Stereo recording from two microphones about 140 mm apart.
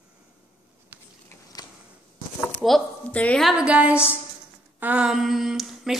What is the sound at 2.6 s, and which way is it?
A woman's voice, 5° left (ahead or behind).